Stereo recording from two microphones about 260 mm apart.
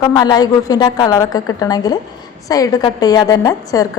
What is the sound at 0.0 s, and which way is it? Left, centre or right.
A woman's voice, centre.